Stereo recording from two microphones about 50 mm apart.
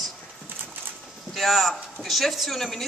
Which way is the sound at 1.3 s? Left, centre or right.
Centre.